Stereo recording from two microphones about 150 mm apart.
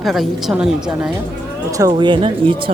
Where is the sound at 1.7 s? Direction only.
25° right (ahead or behind).